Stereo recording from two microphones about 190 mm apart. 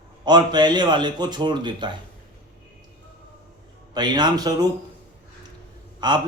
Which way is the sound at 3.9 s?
20° right (ahead or behind).